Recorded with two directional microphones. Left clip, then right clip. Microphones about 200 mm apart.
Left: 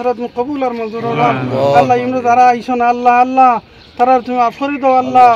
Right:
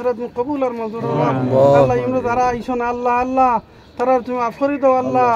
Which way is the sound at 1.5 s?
65° right (ahead or behind).